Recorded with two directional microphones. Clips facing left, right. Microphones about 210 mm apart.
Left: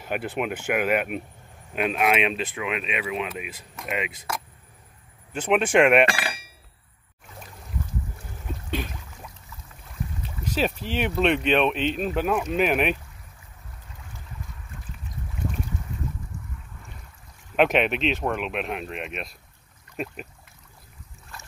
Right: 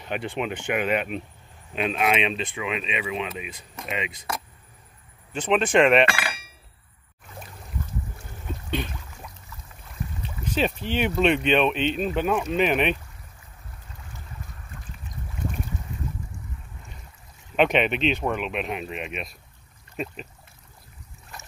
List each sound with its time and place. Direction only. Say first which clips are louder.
0.0 s speech: left 1 dB; 5° left (ahead or behind)
5.3 s speech: even; 10° left (ahead or behind)
6.0 s hammer: even; 35° left (ahead or behind)
8.6 s a sound: right 1 dB; 5° left (ahead or behind)
10.2 s speech: right 1 dB; 5° left (ahead or behind)
17.6 s speech: even; centre (ahead or behind)
21.3 s boat: right 1 dB; 20° right (ahead or behind)